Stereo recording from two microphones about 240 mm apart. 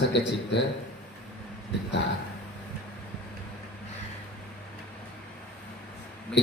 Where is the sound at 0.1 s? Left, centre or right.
Left.